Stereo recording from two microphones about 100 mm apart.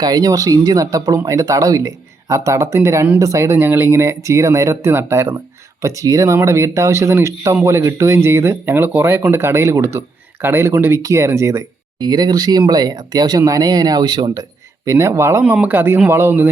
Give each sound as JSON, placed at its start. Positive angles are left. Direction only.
{"t": 0.0, "sound": "speech", "side_deg": -40}
{"t": 11.9, "sound": "speech", "side_deg": -45}
{"t": 14.8, "sound": "speech", "side_deg": -30}